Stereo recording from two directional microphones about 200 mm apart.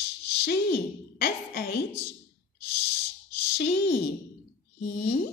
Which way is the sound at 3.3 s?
55° left (ahead or behind).